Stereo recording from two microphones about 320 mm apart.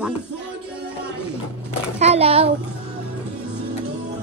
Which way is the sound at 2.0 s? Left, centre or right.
Centre.